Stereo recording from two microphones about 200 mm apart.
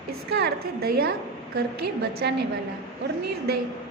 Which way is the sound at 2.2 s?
55° right (ahead or behind).